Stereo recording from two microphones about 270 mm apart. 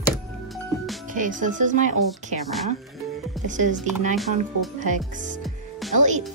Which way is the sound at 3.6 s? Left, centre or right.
Right.